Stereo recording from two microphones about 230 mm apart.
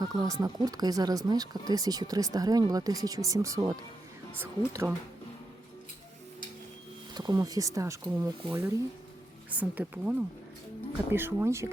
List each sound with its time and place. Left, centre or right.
0.0 s speech: centre
7.1 s speech: centre